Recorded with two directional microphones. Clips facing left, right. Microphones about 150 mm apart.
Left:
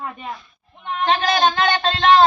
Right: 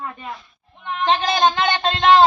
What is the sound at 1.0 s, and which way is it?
A woman's voice, 20° right (ahead or behind).